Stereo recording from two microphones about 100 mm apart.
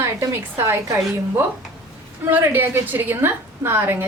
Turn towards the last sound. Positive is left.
turn(degrees=-20)  # may be behind; listen again after turning